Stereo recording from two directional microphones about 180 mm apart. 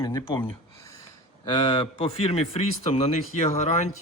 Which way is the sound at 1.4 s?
25° left (ahead or behind).